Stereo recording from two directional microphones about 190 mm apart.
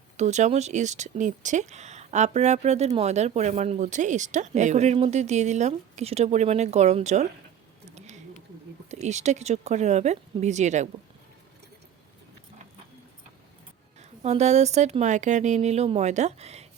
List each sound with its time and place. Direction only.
0.2 s speech: 40° right (ahead or behind)
7.9 s a sound: 35° right (ahead or behind)
8.9 s speech: 35° right (ahead or behind)
14.0 s speech: 35° right (ahead or behind)